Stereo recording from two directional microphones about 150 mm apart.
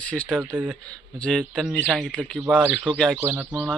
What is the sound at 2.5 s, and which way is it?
Speech, 5° right (ahead or behind).